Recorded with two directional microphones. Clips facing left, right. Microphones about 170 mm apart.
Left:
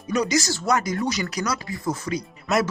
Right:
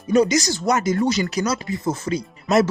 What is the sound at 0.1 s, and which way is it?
Speech, 25° right (ahead or behind).